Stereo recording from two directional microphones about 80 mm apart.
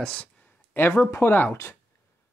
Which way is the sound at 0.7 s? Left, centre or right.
Left.